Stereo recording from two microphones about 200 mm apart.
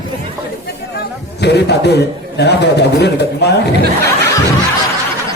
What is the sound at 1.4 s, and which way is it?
A man's voice, 55° left (ahead or behind).